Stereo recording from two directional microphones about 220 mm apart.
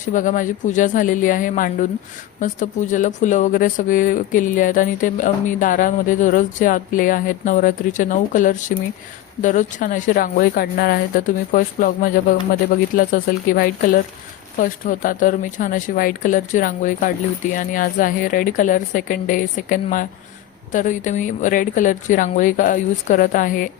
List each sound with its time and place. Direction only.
0.1 s speech: 35° left (ahead or behind)